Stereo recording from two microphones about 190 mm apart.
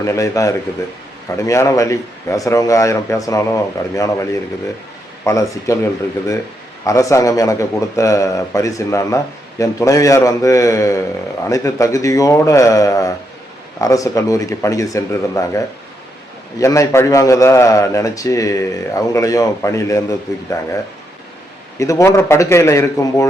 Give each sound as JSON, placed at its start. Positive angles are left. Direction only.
{"t": 0.0, "sound": "a man's voice", "side_deg": 15}
{"t": 6.8, "sound": "a man's voice", "side_deg": 15}
{"t": 21.8, "sound": "a man's voice", "side_deg": 15}